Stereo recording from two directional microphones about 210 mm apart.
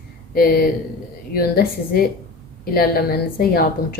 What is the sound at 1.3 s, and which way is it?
A woman's voice, 45° left (ahead or behind).